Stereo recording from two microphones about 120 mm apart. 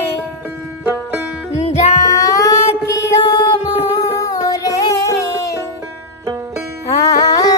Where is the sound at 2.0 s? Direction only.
25° left (ahead or behind).